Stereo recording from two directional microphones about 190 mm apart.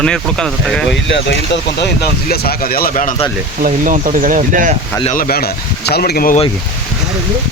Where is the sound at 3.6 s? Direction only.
40° right (ahead or behind).